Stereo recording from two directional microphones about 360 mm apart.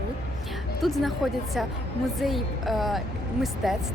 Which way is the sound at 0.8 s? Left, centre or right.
Centre.